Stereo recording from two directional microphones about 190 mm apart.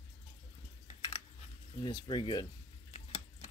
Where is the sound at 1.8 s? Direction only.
25° left (ahead or behind).